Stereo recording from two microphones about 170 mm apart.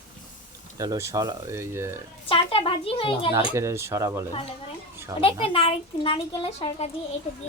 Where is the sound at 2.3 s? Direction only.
30° left (ahead or behind).